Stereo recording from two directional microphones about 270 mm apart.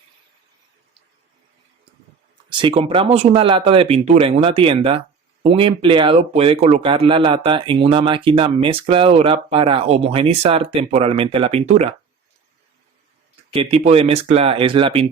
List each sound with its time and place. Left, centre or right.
2.5 s speech: centre
13.5 s speech: right